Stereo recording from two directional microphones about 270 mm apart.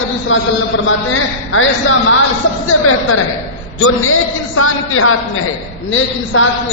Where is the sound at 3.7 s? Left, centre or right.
Left.